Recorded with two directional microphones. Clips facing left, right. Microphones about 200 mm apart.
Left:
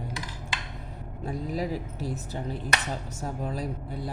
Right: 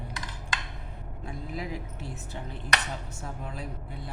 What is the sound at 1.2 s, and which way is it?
Speech, 35° left (ahead or behind).